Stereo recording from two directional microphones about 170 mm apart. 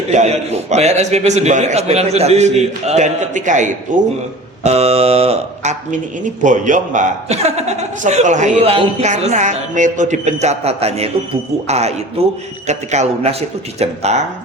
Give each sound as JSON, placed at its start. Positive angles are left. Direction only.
{"t": 0.1, "sound": "a man's voice", "side_deg": -40}
{"t": 4.6, "sound": "a man's voice", "side_deg": -40}